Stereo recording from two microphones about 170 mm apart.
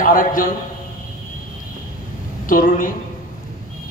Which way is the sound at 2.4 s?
55° left (ahead or behind).